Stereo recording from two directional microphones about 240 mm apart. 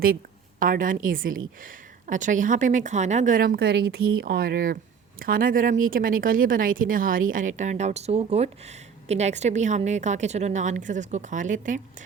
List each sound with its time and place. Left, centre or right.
0.6 s speech: right